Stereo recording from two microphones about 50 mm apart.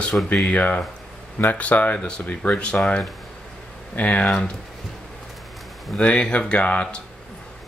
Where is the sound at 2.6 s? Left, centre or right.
Left.